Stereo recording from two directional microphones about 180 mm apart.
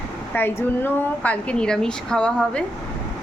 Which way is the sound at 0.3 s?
10° left (ahead or behind).